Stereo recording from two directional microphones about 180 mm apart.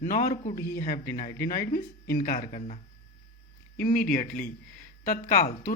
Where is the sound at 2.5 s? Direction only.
40° left (ahead or behind).